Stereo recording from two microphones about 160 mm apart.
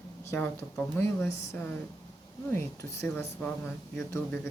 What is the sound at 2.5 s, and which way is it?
A woman's voice, 20° left (ahead or behind).